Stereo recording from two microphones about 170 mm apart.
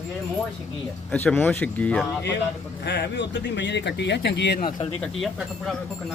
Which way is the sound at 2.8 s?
85° left.